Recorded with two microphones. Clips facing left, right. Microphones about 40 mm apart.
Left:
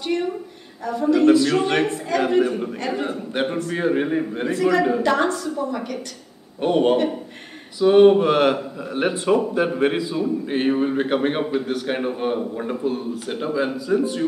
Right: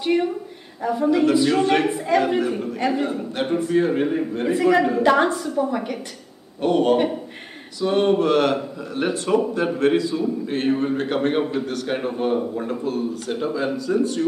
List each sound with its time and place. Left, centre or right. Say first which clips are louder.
0.0 s a woman's voice: right 3 dB; centre
1.6 s a man's voice: right 2 dB; centre
1.9 s a woman's voice: right 3 dB; centre
2.2 s a man's voice: left 2 dB; centre
4.5 s a woman's voice: right 1 dB; centre
6.6 s a man's voice: even; centre